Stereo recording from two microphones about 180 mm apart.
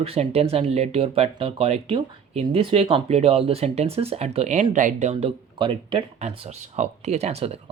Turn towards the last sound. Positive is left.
turn(degrees=-35)  # may be behind; listen again after turning